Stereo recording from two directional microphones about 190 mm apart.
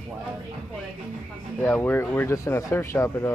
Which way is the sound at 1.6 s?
10° left (ahead or behind).